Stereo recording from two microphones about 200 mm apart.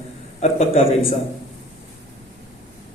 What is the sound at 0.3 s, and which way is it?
Speech, 30° left (ahead or behind).